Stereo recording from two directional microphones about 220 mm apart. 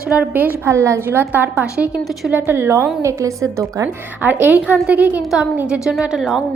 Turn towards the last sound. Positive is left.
turn(degrees=0)  # may be behind; listen again after turning